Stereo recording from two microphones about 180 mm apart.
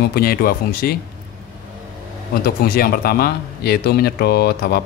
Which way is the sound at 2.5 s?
55° left (ahead or behind).